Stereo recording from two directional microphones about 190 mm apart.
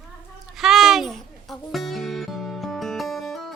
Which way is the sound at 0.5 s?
Centre (ahead or behind).